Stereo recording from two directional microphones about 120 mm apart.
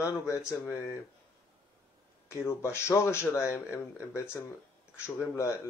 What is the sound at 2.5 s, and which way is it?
Speech, 20° left (ahead or behind).